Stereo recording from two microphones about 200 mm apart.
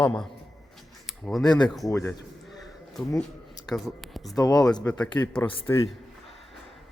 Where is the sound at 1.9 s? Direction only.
15° left (ahead or behind).